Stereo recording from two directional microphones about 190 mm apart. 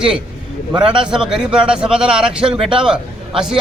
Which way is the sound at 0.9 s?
5° right (ahead or behind).